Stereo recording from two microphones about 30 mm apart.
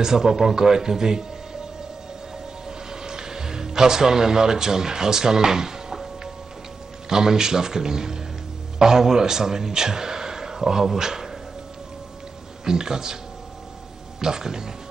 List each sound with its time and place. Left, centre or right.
0.0 s speech: centre
2.9 s speech: right
7.1 s a man's voice: right
12.6 s speech: right
14.2 s speech: centre